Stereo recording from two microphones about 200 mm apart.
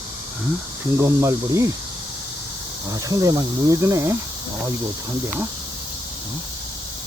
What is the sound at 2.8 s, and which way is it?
Cricket, 20° right (ahead or behind).